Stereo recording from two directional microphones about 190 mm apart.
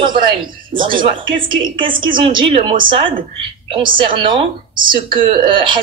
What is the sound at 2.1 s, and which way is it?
Speech, 30° right (ahead or behind).